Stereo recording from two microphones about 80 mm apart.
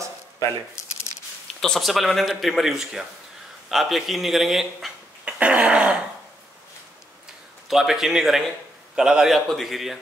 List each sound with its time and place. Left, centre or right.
1.6 s a man's voice: centre
5.2 s throat clearing: centre
7.6 s a man's voice: centre